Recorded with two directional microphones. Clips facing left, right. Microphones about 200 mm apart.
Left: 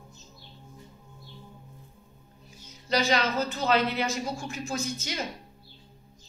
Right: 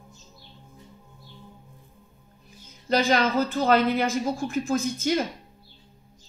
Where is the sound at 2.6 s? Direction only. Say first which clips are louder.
Right 4 dB; 50° right (ahead or behind).